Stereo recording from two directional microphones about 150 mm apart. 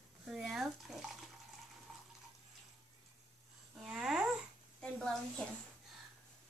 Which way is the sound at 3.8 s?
5° right (ahead or behind).